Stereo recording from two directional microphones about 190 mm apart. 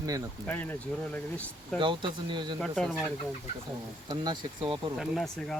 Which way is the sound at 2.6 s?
5° left (ahead or behind).